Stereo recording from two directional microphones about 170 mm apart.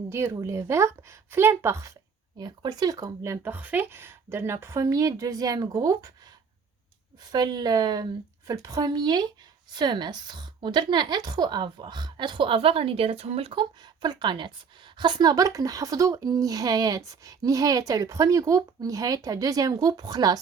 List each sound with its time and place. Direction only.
0.1 s a woman's voice: 15° right (ahead or behind)
7.3 s a woman's voice: 25° right (ahead or behind)